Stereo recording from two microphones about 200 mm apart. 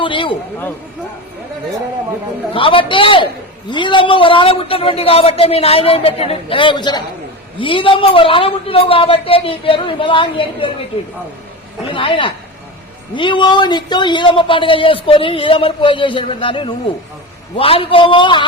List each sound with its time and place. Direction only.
0.0 s a man's voice: 25° left (ahead or behind)
2.5 s a man's voice: 25° left (ahead or behind)
11.9 s a man's voice: 25° left (ahead or behind)